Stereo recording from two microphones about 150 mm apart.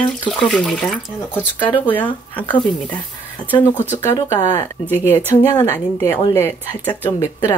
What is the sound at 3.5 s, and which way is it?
A woman's voice, 10° left (ahead or behind).